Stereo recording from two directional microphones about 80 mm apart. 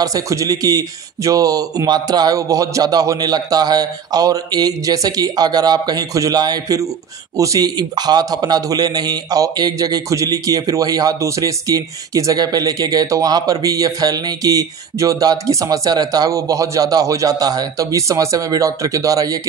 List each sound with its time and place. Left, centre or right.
0.0 s a man's voice: right